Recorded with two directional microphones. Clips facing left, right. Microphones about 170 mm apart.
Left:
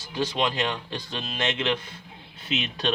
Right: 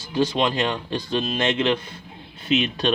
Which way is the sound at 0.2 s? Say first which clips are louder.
Right 5 dB; 30° right (ahead or behind).